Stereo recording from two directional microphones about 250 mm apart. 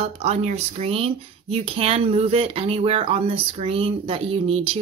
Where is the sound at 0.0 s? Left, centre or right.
Right.